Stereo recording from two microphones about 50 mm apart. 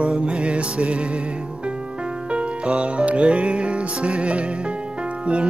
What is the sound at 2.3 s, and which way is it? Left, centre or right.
Music, right.